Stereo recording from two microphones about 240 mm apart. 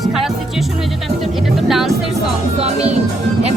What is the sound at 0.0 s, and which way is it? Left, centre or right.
Speech, centre.